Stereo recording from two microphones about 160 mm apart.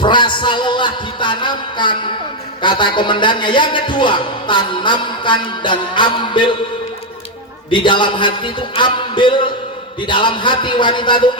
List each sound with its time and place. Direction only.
0.0 s a man's voice: 30° left (ahead or behind)
7.7 s a man's voice: 30° left (ahead or behind)